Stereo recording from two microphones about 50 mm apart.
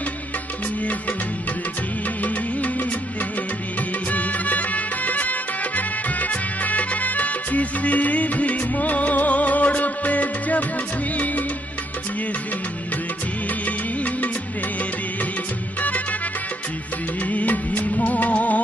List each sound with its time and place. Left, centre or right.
2.2 s music: left
4.1 s music: left
13.7 s music: left
15.8 s music: left
17.3 s music of bollywood: left